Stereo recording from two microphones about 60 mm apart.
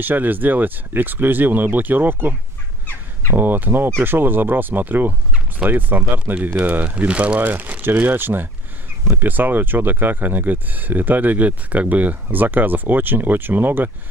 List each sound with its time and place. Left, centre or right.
0.0 s speech: right